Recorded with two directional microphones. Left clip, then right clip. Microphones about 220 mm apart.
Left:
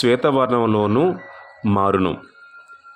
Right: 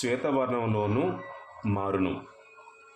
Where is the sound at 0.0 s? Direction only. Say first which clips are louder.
Left 11 dB; 40° left (ahead or behind).